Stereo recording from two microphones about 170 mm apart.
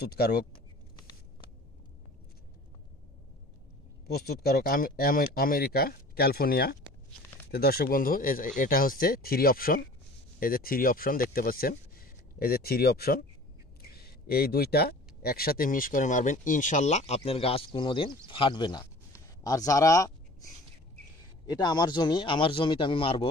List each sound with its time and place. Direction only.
0.0 s speech: 65° left (ahead or behind)
4.1 s speech: 65° left (ahead or behind); by 23.2 s 30° left (ahead or behind)